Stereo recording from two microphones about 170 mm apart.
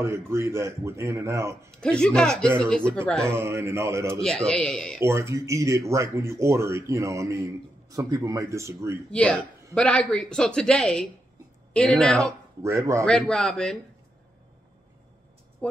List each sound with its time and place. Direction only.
0.0 s speech: 15° right (ahead or behind)
1.7 s speech: 5° left (ahead or behind)
3.3 s speech: 15° right (ahead or behind)
4.5 s speech: 5° left (ahead or behind)
5.0 s speech: 15° right (ahead or behind)
9.1 s a man's voice: 5° left (ahead or behind)
12.6 s speech: 15° right (ahead or behind)
13.0 s speech: 5° left (ahead or behind)
15.6 s vehicle: 5° left (ahead or behind)